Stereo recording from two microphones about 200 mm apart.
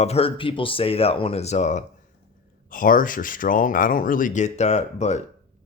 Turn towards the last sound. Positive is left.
turn(degrees=35)  # may be behind; listen again after turning